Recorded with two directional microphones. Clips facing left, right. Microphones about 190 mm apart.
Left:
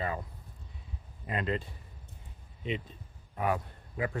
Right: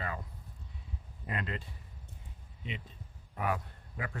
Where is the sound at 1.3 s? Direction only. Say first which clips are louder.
Left 7 dB; 25° left (ahead or behind).